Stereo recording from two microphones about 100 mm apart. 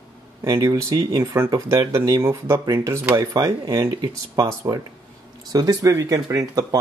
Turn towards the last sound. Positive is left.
turn(degrees=-35)  # may be behind; listen again after turning